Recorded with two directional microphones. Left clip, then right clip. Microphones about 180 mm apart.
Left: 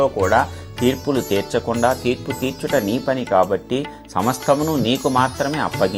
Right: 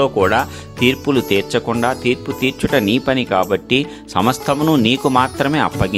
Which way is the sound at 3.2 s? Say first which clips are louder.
Right 1 dB; 35° right (ahead or behind).